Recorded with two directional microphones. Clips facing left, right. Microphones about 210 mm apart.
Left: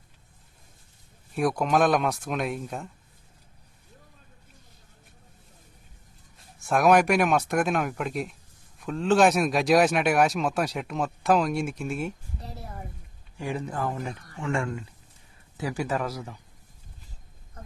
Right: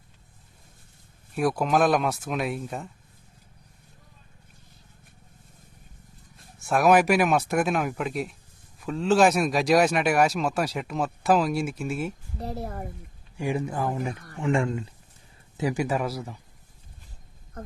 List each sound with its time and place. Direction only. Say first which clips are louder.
1.4 s speech: even; centre (ahead or behind)
6.7 s speech: right 1 dB; centre (ahead or behind)
12.4 s a woman's voice: right 8 dB; 55° right (ahead or behind)
13.4 s a man's voice: right 3 dB; 10° right (ahead or behind)